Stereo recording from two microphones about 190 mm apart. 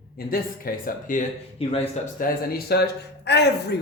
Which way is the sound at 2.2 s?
50° left (ahead or behind).